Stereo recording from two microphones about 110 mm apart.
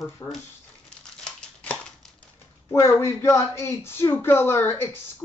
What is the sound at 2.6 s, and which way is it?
Speech, 25° left (ahead or behind).